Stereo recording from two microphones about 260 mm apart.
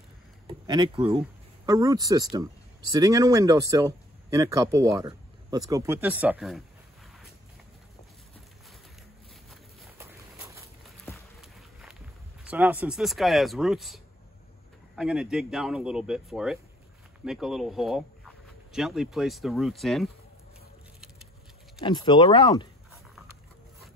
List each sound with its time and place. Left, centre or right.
0.7 s speech: centre
9.5 s a sound: centre
12.4 s speech: centre
21.8 s speech: centre